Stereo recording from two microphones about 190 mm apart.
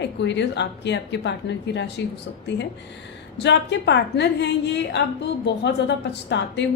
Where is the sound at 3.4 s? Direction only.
65° left (ahead or behind).